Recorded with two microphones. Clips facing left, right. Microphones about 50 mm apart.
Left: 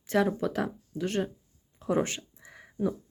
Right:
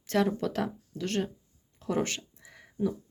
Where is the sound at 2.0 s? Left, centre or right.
Centre.